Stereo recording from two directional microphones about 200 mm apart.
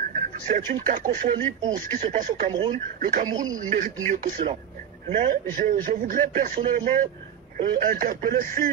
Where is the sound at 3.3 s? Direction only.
20° right (ahead or behind).